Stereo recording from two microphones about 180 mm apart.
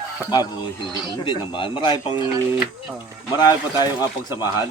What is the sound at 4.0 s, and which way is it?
Speech, 15° right (ahead or behind).